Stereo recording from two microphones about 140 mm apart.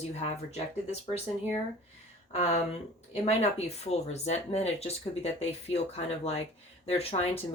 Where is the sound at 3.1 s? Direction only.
50° left (ahead or behind).